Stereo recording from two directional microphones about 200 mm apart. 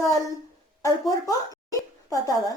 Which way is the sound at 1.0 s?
15° left (ahead or behind).